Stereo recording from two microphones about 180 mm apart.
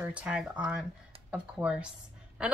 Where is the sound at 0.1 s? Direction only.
5° right (ahead or behind).